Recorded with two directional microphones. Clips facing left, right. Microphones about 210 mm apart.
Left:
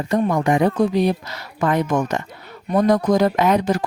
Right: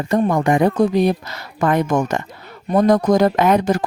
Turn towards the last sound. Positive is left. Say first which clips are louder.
# right 2 dB
turn(degrees=-45)  # may be behind; listen again after turning